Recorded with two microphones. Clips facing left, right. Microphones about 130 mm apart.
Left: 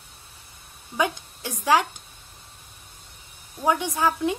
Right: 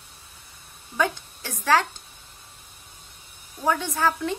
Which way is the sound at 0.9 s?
15° left (ahead or behind).